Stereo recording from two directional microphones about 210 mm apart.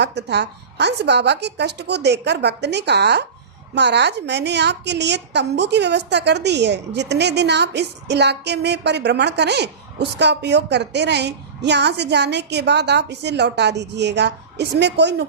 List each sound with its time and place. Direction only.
0.0 s a woman's voice: 55° right (ahead or behind)